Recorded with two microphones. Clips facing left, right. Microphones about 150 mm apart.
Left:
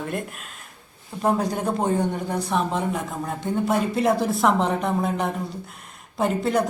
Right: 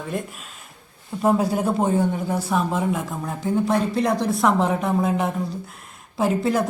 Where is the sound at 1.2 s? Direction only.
5° right (ahead or behind).